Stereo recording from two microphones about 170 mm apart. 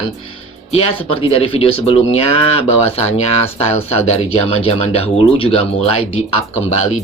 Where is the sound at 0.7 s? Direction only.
35° left (ahead or behind).